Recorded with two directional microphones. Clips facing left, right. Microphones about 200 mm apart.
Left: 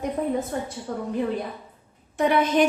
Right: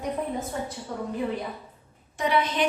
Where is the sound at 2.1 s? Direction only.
50° left (ahead or behind).